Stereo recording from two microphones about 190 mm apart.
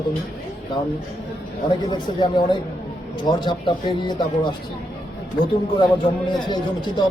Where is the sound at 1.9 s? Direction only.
25° left (ahead or behind).